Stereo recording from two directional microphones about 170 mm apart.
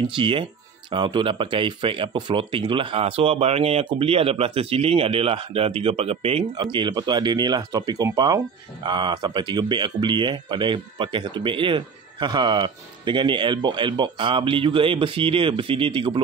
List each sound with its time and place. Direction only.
0.1 s speech: 30° right (ahead or behind)